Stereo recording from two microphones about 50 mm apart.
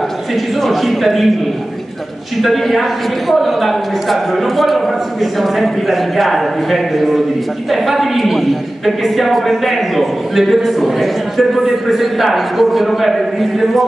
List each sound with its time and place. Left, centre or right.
0.6 s a man's voice: centre
2.4 s a man's voice: centre